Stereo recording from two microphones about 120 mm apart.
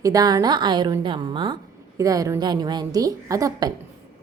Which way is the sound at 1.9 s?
30° right (ahead or behind).